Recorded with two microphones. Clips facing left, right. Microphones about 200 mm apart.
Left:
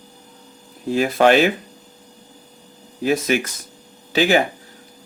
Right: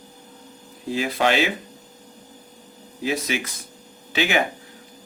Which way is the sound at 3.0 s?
50° left (ahead or behind).